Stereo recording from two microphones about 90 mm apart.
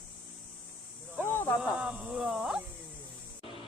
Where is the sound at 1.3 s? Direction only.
25° left (ahead or behind).